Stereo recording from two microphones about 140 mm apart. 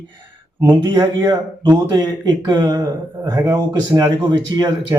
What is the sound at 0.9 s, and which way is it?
Speech, 30° right (ahead or behind).